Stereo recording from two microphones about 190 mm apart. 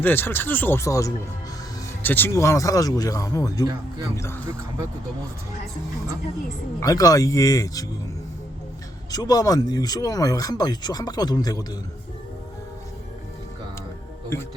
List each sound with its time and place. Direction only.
0.0 s speech: 10° left (ahead or behind)
3.6 s speech: 20° right (ahead or behind)
6.7 s speech: 20° left (ahead or behind)
9.1 s speech: 20° left (ahead or behind)
14.3 s speech: 15° left (ahead or behind)